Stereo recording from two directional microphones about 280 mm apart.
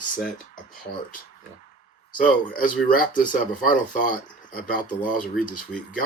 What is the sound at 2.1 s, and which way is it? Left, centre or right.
Speech, left.